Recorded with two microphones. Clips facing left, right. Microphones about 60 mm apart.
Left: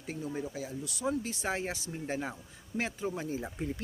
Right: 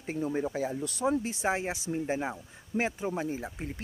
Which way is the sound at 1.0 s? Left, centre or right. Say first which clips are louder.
Right 5 dB; right.